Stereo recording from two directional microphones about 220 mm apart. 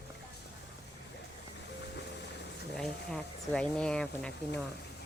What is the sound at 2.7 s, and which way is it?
Speech, 5° left (ahead or behind).